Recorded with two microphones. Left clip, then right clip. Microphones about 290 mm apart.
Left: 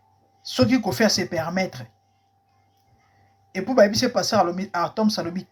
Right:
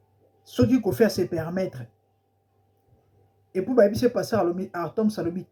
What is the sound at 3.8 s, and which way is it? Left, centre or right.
Speech, centre.